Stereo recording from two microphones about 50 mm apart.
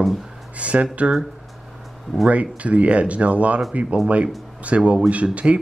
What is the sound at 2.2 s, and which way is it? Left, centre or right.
Speech, right.